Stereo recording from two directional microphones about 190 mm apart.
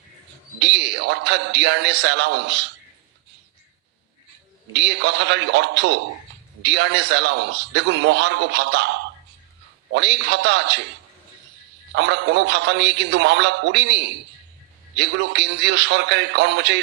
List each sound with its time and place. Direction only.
0.6 s a man's voice: 65° right (ahead or behind)
4.7 s a man's voice: 65° right (ahead or behind)
11.9 s a man's voice: 65° right (ahead or behind)